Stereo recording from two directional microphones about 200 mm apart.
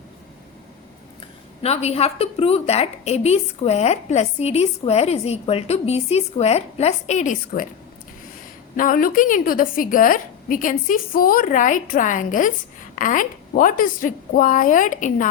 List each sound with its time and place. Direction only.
1.6 s a woman's voice: 30° left (ahead or behind)
8.7 s a woman's voice: 45° left (ahead or behind)